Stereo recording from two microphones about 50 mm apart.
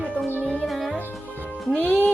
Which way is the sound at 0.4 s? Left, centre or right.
Left.